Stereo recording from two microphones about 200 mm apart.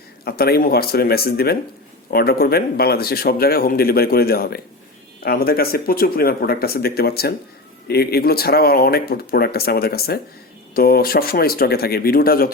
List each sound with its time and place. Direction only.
0.3 s speech: 50° left (ahead or behind)